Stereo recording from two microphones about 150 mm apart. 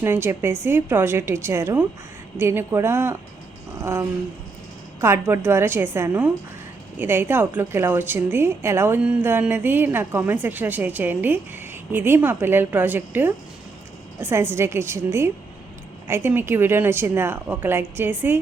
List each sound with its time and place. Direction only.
0.0 s a woman's voice: 15° right (ahead or behind)
3.8 s a sound: 15° right (ahead or behind)
4.9 s a woman's voice: 15° right (ahead or behind)